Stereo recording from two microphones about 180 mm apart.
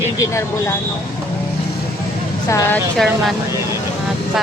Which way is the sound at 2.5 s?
15° left (ahead or behind).